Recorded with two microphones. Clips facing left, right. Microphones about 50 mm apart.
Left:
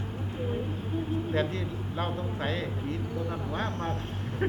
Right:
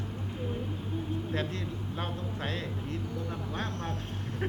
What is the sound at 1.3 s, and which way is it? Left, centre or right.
A man's voice, centre.